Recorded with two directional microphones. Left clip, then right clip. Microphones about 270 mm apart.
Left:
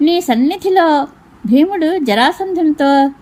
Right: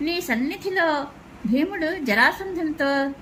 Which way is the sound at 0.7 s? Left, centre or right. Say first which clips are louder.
Left 10 dB; left.